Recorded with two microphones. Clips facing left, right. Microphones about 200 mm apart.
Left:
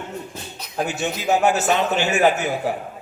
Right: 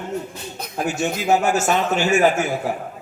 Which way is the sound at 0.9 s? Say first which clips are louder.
Right 3 dB; 45° right (ahead or behind).